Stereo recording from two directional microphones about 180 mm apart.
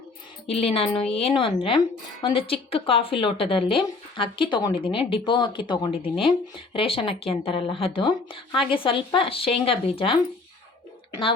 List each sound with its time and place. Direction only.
0.4 s a woman's voice: 35° left (ahead or behind)